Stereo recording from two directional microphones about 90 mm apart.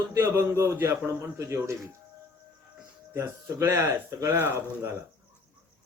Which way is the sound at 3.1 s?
35° right (ahead or behind).